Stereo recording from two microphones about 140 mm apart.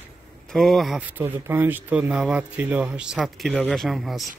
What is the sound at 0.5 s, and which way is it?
Speech, centre (ahead or behind).